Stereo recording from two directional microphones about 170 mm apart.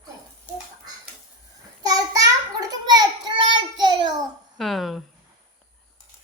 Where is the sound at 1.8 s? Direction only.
20° right (ahead or behind).